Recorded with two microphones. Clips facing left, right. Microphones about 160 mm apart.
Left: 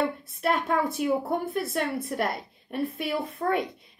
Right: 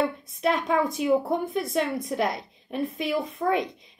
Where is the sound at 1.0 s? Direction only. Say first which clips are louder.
Right 5 dB; 10° right (ahead or behind).